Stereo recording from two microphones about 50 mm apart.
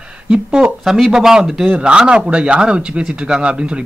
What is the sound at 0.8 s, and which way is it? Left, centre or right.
A man's voice, centre.